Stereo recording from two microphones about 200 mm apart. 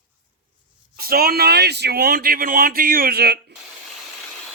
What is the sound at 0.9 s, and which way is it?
Speech, 50° right (ahead or behind).